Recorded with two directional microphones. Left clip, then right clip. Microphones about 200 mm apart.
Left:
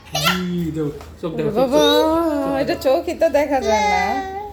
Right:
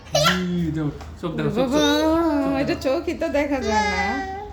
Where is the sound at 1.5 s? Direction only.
10° right (ahead or behind).